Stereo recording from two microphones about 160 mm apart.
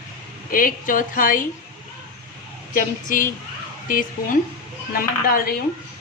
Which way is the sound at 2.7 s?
60° left (ahead or behind).